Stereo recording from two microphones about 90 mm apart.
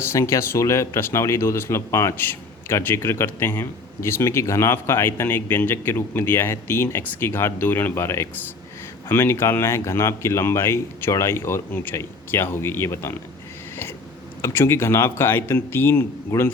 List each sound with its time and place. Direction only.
0.0 s speech: 30° left (ahead or behind)
14.4 s speech: 30° left (ahead or behind)